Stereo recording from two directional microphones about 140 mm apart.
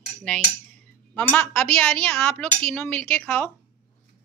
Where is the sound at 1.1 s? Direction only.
10° left (ahead or behind).